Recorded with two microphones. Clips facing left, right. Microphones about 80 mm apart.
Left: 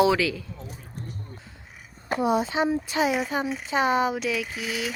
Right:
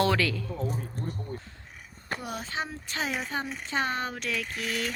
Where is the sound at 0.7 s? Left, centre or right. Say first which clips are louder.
Right 6 dB; right.